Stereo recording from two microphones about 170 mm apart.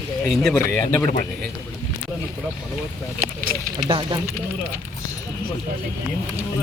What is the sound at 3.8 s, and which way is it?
Speech, 30° right (ahead or behind).